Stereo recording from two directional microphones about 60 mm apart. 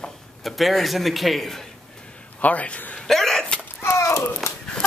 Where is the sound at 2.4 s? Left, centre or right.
Left.